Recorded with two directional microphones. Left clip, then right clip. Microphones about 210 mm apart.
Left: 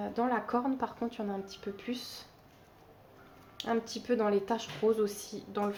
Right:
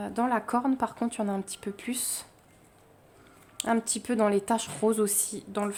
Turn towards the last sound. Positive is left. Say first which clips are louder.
# right 3 dB
turn(degrees=-45)  # may be behind; listen again after turning